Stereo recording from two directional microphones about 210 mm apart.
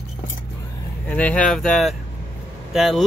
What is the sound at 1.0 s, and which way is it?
Speech, 5° left (ahead or behind).